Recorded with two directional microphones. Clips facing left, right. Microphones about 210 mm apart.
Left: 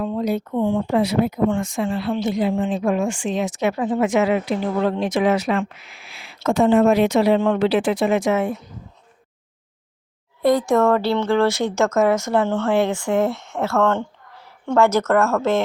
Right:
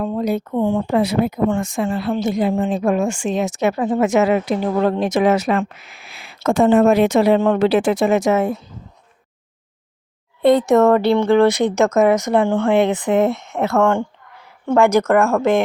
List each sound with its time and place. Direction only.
0.0 s speech: 50° right (ahead or behind)
10.4 s speech: 20° right (ahead or behind)